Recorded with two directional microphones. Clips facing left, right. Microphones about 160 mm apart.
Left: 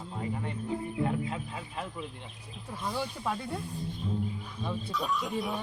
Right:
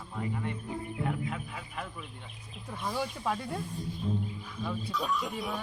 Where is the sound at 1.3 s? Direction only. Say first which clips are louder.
Left 2 dB; 25° left (ahead or behind).